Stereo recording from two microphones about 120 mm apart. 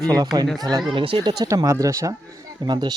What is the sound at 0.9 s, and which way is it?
Speech, 45° right (ahead or behind).